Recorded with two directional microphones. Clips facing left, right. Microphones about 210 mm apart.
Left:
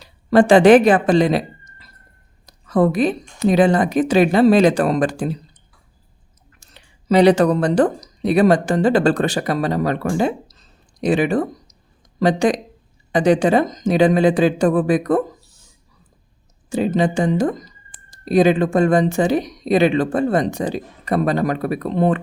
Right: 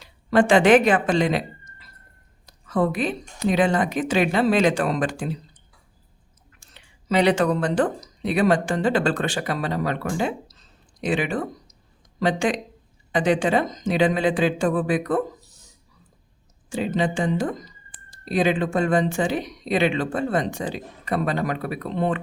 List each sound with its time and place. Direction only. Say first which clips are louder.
0.0 s speech: left 5 dB; 35° left (ahead or behind)
6.6 s speech: left 4 dB; 40° left (ahead or behind)
16.6 s speech: left 6 dB; 40° left (ahead or behind)